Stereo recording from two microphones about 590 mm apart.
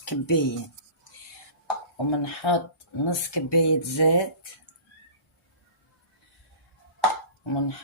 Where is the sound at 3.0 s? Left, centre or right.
Left.